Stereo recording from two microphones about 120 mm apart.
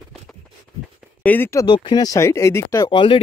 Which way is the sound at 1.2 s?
15° left (ahead or behind).